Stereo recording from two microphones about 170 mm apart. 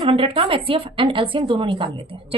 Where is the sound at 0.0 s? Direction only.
35° right (ahead or behind).